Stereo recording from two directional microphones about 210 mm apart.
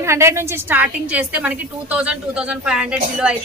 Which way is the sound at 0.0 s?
10° right (ahead or behind).